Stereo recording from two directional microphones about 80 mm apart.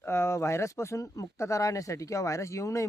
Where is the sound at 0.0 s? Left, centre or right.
Left.